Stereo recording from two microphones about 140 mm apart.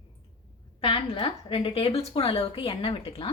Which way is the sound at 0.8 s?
40° left (ahead or behind).